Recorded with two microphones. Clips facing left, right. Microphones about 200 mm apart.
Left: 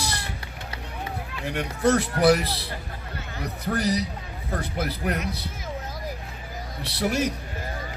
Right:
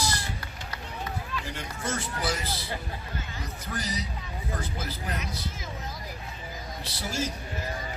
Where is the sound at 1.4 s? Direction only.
60° left (ahead or behind).